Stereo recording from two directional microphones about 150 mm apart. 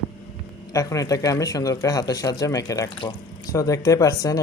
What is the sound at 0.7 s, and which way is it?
Speech, 20° left (ahead or behind).